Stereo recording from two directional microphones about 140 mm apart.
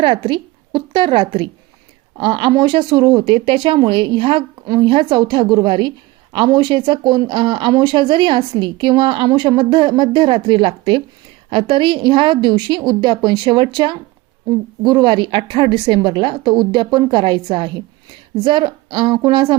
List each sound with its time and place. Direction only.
0.0 s a woman's voice: 35° right (ahead or behind)